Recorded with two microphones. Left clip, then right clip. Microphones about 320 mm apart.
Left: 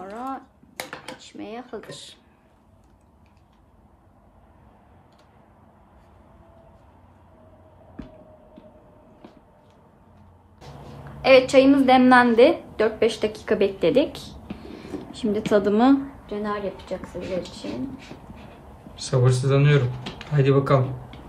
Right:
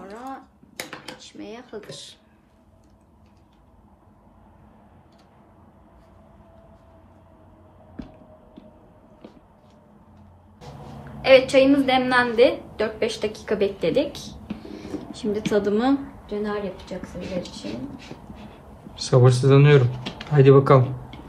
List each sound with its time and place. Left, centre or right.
0.0 s dishes: left
0.7 s cutlery: centre
1.2 s a woman's voice: left
11.1 s a woman's voice: centre
15.3 s a woman's voice: left
17.6 s a sound: centre
18.9 s speech: centre